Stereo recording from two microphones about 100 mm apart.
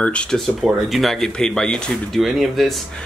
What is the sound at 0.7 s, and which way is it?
Speech, centre (ahead or behind).